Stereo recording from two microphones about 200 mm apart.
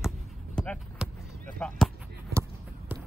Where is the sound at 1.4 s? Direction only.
5° left (ahead or behind).